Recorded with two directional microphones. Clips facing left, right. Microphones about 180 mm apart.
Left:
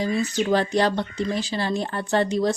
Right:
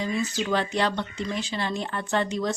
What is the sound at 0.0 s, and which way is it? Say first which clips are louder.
A woman's voice: left 4 dB; 35° left (ahead or behind).